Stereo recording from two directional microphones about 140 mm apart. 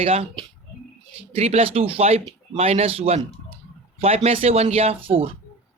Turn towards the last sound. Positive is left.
turn(degrees=-40)  # may be behind; listen again after turning